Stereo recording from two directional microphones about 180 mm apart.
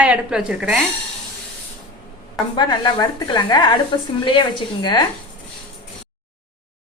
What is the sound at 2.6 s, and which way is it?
Speech, 25° left (ahead or behind).